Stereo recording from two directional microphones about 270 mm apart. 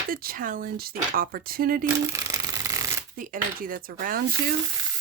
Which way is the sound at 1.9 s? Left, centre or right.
Centre.